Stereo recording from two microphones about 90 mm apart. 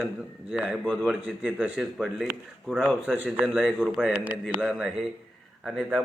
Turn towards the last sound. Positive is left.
turn(degrees=-10)  # may be behind; listen again after turning